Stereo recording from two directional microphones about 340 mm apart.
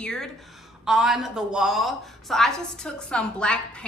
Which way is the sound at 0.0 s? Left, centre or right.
Centre.